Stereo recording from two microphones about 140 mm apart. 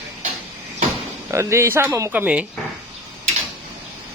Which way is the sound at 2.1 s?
10° right (ahead or behind).